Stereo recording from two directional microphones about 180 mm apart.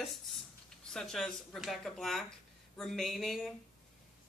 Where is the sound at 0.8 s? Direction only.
Centre (ahead or behind).